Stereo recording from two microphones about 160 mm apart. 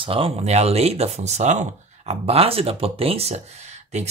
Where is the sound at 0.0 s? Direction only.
35° right (ahead or behind).